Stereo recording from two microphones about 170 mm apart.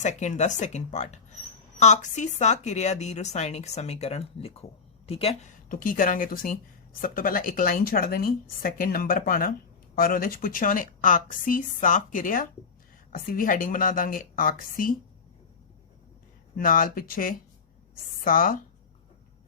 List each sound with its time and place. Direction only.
0.0 s a woman's voice: 45° left (ahead or behind)
5.6 s a woman's voice: 55° left (ahead or behind)
16.6 s a woman's voice: 55° left (ahead or behind)